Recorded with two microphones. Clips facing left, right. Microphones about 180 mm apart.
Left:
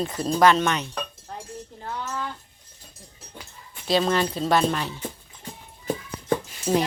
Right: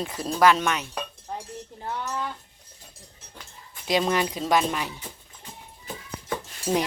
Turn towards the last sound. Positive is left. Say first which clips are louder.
# left 2 dB
turn(degrees=-15)  # may be behind; listen again after turning